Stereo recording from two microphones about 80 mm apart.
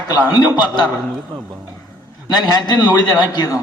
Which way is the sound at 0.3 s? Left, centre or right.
Left.